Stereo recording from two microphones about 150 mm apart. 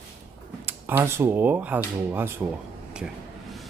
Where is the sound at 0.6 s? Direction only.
15° right (ahead or behind).